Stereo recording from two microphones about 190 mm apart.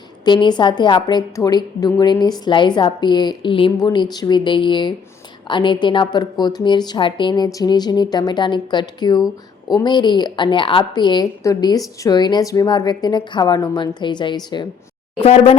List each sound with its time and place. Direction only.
0.3 s a woman's voice: 25° left (ahead or behind)